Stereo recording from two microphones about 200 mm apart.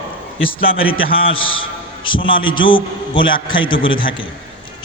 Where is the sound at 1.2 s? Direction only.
25° left (ahead or behind).